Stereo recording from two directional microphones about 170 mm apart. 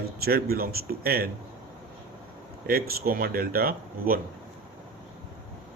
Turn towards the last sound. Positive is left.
turn(degrees=-60)  # may be behind; listen again after turning